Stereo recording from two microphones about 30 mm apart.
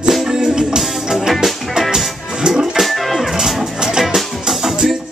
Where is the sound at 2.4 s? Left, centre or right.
Right.